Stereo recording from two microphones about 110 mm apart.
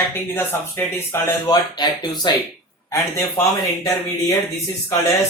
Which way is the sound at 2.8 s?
25° left (ahead or behind).